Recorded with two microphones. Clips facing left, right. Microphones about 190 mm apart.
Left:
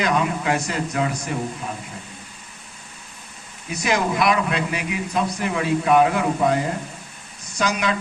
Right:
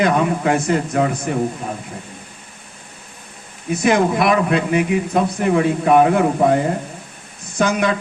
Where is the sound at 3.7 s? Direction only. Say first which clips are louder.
Right 7 dB; 55° right (ahead or behind).